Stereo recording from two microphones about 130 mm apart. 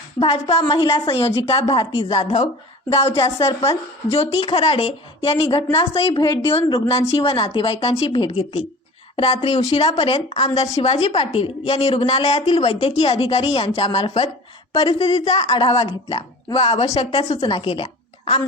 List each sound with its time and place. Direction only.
0.2 s a woman's voice: 45° left (ahead or behind)
6.1 s a woman's voice: 40° left (ahead or behind); by 15.4 s 55° left (ahead or behind)
15.4 s a woman's voice: 40° left (ahead or behind)